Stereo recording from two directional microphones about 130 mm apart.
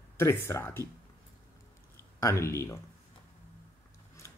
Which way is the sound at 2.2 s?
20° left (ahead or behind).